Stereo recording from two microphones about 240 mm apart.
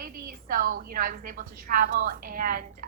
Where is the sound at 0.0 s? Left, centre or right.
Right.